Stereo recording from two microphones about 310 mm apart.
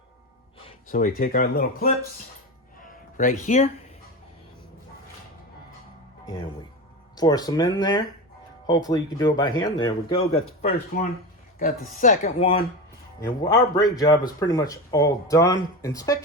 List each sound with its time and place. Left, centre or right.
0.9 s speech: left
2.8 s music: left
6.2 s speech: centre
13.7 s speech: centre